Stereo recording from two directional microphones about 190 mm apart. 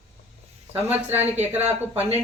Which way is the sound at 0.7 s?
10° right (ahead or behind).